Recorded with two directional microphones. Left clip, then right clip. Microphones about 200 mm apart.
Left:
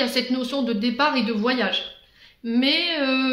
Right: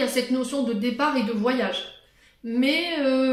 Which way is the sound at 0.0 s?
35° left (ahead or behind).